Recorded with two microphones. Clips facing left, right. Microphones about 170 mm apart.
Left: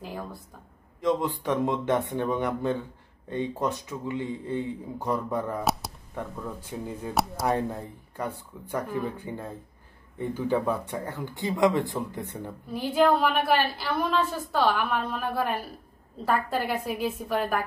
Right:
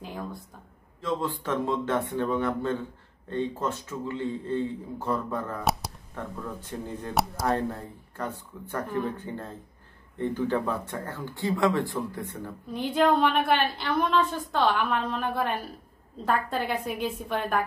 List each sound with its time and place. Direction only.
0.0 s a woman's voice: centre (ahead or behind)
1.0 s speech: 15° left (ahead or behind)
5.6 s speech: centre (ahead or behind)
7.4 s speech: 15° left (ahead or behind)
12.7 s a woman's voice: 5° left (ahead or behind)